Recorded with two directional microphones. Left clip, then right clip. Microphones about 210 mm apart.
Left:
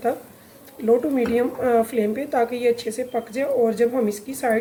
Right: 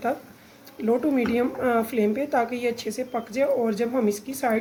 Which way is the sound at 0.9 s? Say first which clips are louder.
Left 4 dB; 40° right (ahead or behind).